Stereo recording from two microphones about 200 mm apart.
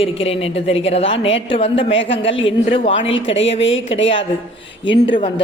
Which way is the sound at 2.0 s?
65° left (ahead or behind).